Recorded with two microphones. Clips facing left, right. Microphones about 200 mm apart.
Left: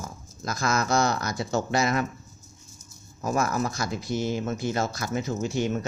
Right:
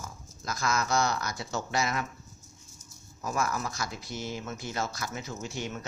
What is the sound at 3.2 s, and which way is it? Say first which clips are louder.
Speech: left 6 dB; 45° left (ahead or behind).